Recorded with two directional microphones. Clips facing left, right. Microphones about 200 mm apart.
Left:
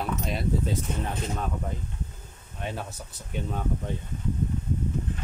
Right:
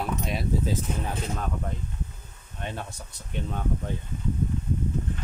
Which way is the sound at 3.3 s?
5° left (ahead or behind).